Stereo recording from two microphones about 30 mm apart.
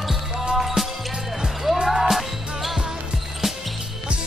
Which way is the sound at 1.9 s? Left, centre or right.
Centre.